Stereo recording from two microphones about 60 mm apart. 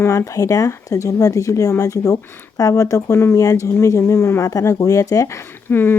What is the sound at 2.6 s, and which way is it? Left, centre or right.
Speech, left.